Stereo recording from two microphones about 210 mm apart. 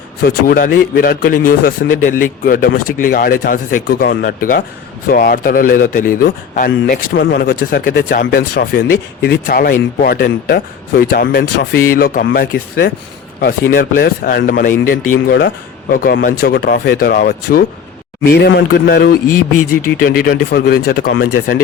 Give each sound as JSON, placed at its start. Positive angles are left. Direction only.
{"t": 0.2, "sound": "speech", "side_deg": 45}